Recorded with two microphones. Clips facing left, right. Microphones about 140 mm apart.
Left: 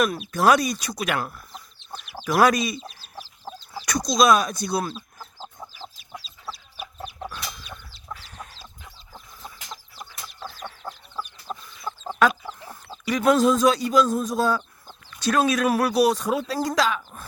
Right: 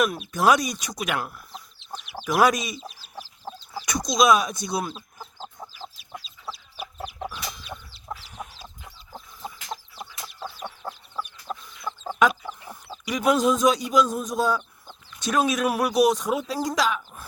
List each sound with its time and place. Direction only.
0.0 s speech: 10° right (ahead or behind)
1.9 s chicken: 15° right (ahead or behind)
4.1 s speech: centre (ahead or behind)
4.8 s chicken: 15° right (ahead or behind)
6.1 s chicken: centre (ahead or behind)
7.7 s chicken: 20° right (ahead or behind)
13.1 s speech: 10° right (ahead or behind)